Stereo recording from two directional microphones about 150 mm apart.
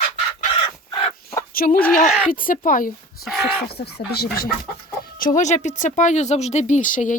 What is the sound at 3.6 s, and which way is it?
Speech, 90° left.